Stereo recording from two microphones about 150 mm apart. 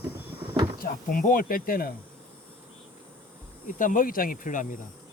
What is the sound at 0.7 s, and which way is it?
Speech, 70° left (ahead or behind).